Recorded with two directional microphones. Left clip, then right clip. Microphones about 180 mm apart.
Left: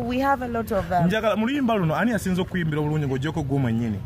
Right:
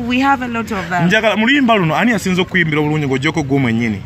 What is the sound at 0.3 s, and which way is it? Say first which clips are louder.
Speech: right 7 dB; 30° left (ahead or behind).